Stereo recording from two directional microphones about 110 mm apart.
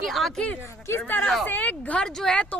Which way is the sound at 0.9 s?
20° left (ahead or behind).